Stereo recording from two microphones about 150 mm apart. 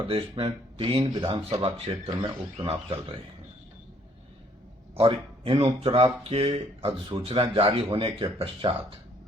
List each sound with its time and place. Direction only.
0.1 s speech: 40° right (ahead or behind)
4.9 s speech: 35° right (ahead or behind)